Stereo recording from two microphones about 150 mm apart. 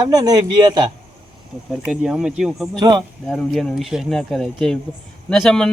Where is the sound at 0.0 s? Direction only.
25° right (ahead or behind).